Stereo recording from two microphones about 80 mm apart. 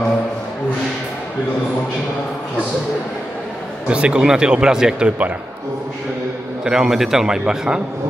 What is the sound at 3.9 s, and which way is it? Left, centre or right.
Speech, centre.